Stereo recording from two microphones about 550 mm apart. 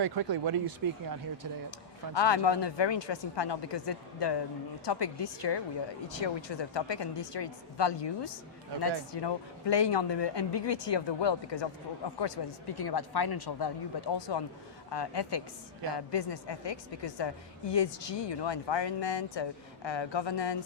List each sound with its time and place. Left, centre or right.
0.0 s speech: right
2.1 s a woman's voice: left